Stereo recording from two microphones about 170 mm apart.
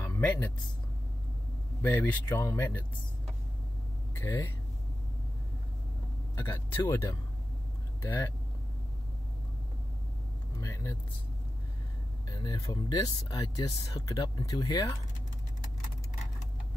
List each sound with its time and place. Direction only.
0.0 s a sound: 10° left (ahead or behind)
1.8 s speech: 10° left (ahead or behind)
4.2 s speech: 15° left (ahead or behind)
6.3 s speech: 15° left (ahead or behind)
10.6 s speech: 20° left (ahead or behind)
12.3 s speech: 25° left (ahead or behind)